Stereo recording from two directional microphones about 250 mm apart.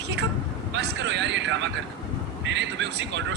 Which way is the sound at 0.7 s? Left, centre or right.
Right.